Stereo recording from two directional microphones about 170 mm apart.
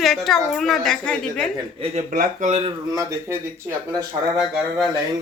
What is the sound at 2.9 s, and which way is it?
Speech, 20° right (ahead or behind).